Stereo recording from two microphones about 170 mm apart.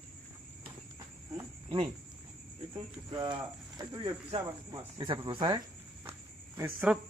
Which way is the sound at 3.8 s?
20° right (ahead or behind).